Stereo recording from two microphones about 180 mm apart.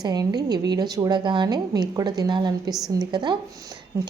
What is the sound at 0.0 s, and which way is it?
A woman's voice, 20° right (ahead or behind).